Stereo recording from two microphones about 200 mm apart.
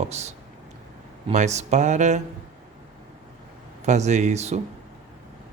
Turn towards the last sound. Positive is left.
turn(degrees=-35)  # may be behind; listen again after turning